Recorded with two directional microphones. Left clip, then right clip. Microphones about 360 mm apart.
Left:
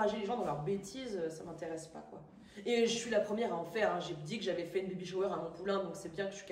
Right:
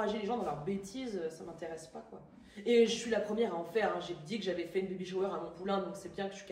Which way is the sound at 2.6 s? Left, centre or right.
Centre.